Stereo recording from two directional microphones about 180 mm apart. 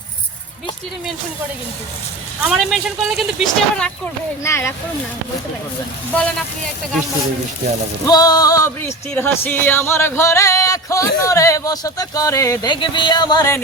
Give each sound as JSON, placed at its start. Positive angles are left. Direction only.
{"t": 2.4, "sound": "speech", "side_deg": 0}
{"t": 4.4, "sound": "music", "side_deg": 15}
{"t": 8.0, "sound": "music", "side_deg": 20}